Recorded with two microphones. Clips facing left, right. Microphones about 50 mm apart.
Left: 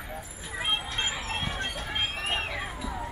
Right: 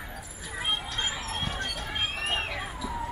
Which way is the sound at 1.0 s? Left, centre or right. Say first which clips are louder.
Left 1 dB; left.